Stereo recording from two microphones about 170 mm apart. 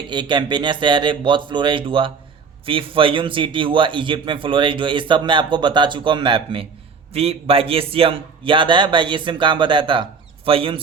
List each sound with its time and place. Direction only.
0.1 s a man's voice: 25° right (ahead or behind)